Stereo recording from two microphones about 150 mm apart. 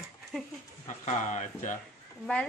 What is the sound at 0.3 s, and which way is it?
Speech, 5° left (ahead or behind).